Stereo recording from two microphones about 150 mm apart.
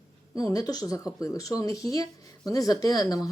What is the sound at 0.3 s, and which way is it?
Speech, 25° left (ahead or behind).